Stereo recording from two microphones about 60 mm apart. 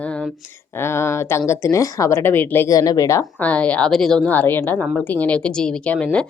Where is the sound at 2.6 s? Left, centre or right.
Left.